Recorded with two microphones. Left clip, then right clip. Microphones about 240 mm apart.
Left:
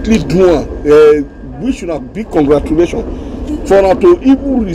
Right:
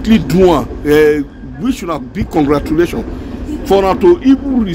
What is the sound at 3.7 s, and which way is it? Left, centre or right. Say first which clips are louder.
Speech: left 2 dB; right.